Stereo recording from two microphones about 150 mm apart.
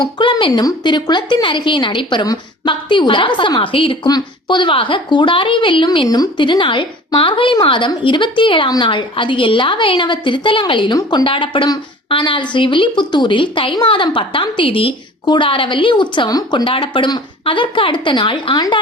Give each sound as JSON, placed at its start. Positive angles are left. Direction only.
{"t": 0.2, "sound": "a woman's voice", "side_deg": 35}